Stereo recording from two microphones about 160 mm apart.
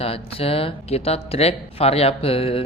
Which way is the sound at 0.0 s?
35° left (ahead or behind).